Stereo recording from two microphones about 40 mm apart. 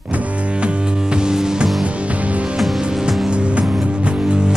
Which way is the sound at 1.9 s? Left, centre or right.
Right.